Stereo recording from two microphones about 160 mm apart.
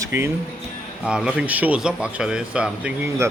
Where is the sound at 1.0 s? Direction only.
5° right (ahead or behind).